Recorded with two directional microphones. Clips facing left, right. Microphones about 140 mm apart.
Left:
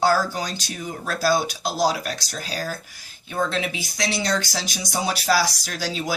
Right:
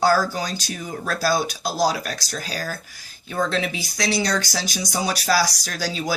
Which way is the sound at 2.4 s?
40° right (ahead or behind).